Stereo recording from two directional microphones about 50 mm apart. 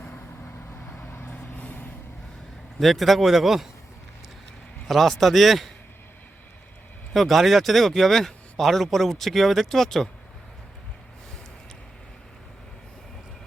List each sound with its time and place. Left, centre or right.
0.0 s vehicle: left
1.0 s vehicle: left
1.3 s vehicle: left
2.7 s speech: centre
4.9 s speech: centre
7.1 s speech: centre